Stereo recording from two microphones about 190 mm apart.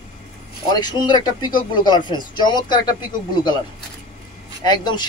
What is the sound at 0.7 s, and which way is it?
Speech, 20° left (ahead or behind).